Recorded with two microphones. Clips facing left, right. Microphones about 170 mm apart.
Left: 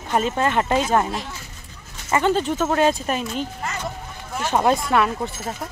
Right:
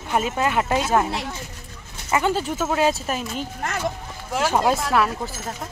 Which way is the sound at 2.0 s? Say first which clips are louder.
Left 2 dB; 10° right (ahead or behind).